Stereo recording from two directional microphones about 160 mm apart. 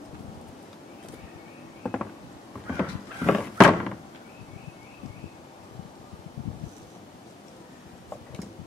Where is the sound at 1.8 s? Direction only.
5° left (ahead or behind).